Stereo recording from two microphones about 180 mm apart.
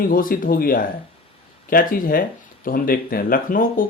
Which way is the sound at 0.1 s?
50° left (ahead or behind).